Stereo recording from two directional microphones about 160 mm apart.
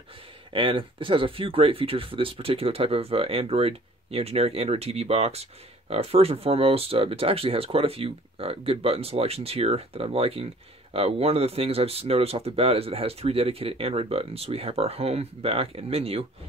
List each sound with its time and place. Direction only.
0.5 s speech: 30° right (ahead or behind)